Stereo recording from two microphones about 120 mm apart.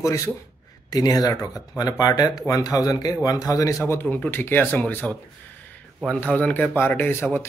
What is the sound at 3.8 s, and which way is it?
A man's voice, 20° left (ahead or behind).